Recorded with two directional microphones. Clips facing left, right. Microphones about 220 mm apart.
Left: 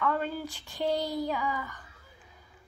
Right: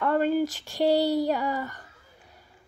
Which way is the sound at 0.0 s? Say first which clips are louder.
Right 8 dB; 70° right (ahead or behind).